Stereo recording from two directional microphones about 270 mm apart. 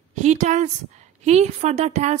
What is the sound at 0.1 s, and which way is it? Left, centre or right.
A woman's voice, right.